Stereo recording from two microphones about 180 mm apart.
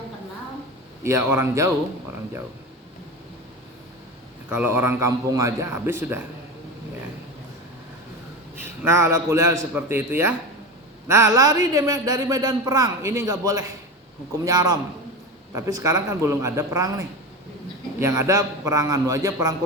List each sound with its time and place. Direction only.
1.0 s a man's voice: 15° right (ahead or behind)
4.4 s a man's voice: 10° right (ahead or behind)
8.6 s a man's voice: 15° right (ahead or behind)
18.0 s a man's voice: 15° right (ahead or behind)